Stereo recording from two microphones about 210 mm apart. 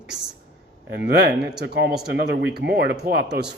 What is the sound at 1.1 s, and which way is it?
A man's voice, 50° right (ahead or behind).